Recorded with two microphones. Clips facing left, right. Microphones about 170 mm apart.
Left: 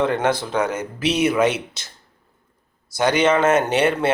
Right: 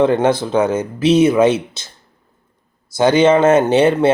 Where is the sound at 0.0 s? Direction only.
25° right (ahead or behind).